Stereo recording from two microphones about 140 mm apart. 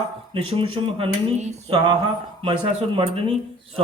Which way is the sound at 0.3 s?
40° right (ahead or behind).